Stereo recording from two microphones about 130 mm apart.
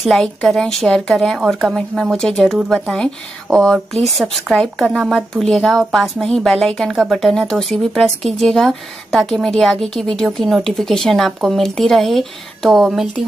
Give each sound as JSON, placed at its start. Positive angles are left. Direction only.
{"t": 0.0, "sound": "a woman's voice", "side_deg": 0}
{"t": 4.9, "sound": "speech", "side_deg": -10}
{"t": 5.3, "sound": "a woman's voice", "side_deg": 5}